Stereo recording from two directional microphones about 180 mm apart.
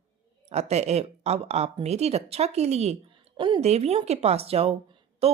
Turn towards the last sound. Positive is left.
turn(degrees=-35)  # may be behind; listen again after turning